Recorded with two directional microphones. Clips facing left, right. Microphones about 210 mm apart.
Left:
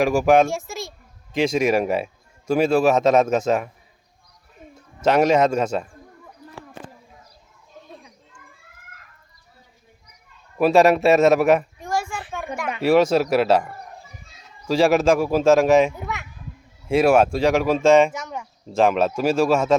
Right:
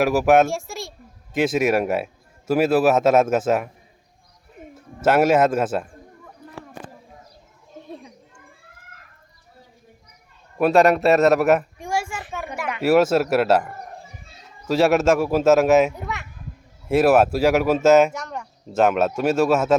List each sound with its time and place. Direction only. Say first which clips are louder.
0.0 s a man's voice: even; 5° right (ahead or behind)
5.0 s speech: even; 5° right (ahead or behind)
6.4 s a sound: right 1 dB; 20° right (ahead or behind)
10.6 s a man's voice: left 1 dB; centre (ahead or behind)